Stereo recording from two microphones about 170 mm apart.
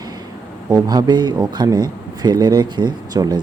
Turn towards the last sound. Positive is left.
turn(degrees=-25)  # may be behind; listen again after turning